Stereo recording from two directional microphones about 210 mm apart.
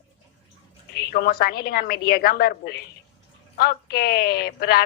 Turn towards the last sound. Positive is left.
turn(degrees=45)  # may be behind; listen again after turning